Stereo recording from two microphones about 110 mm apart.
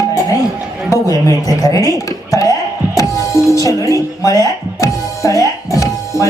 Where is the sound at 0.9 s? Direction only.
30° left (ahead or behind).